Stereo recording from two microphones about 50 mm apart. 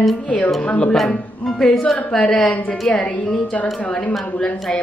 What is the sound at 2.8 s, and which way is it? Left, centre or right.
A woman's voice, left.